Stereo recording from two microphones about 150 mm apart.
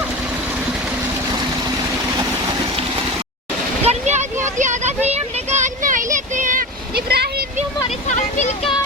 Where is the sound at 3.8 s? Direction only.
45° right (ahead or behind); by 7.5 s 90° right.